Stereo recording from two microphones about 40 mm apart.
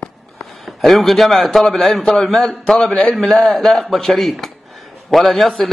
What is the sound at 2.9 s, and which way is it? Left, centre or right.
Speech, left.